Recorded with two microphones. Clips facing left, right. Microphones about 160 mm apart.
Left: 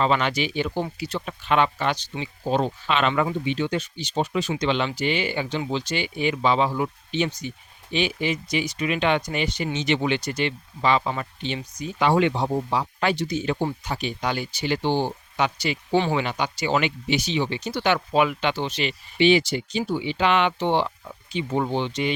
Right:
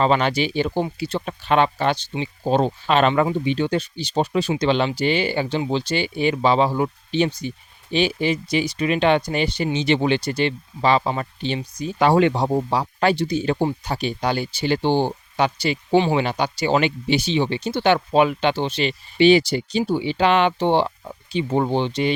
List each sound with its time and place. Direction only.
0.0 s speech: 35° right (ahead or behind)